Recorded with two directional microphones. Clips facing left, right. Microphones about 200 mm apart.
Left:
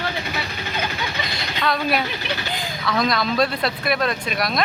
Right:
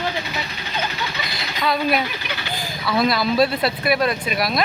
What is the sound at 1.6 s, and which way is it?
Speech, centre (ahead or behind).